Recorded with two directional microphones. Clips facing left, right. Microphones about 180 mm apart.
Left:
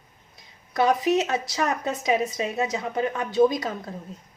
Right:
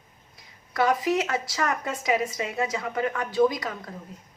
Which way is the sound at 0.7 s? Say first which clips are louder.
Left 2 dB; 20° left (ahead or behind).